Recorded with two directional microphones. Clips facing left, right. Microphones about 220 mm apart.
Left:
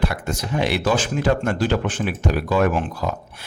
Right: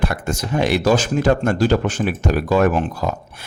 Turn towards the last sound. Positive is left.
turn(degrees=-40)  # may be behind; listen again after turning